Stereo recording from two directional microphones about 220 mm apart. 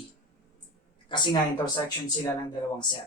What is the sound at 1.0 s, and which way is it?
Speech, 20° left (ahead or behind).